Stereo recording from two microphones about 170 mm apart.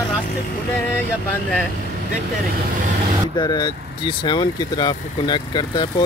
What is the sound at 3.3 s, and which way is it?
Speech, 25° left (ahead or behind).